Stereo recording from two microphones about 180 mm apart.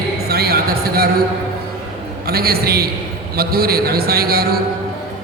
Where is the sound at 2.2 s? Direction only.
60° right (ahead or behind).